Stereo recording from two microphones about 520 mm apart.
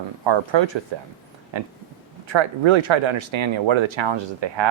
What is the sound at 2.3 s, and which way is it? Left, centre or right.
Speech, right.